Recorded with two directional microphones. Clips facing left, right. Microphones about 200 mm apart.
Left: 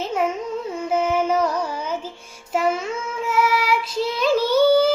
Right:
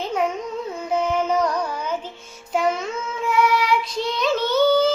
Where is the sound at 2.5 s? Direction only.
5° left (ahead or behind).